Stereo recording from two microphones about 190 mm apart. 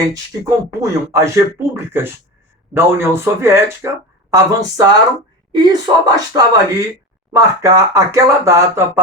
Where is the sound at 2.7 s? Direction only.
15° right (ahead or behind).